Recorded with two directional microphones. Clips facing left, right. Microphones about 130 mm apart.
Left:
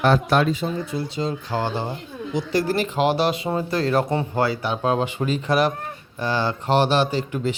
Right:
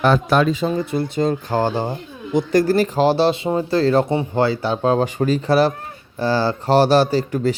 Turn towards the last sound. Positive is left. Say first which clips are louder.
# right 5 dB
turn(degrees=-40)  # may be behind; listen again after turning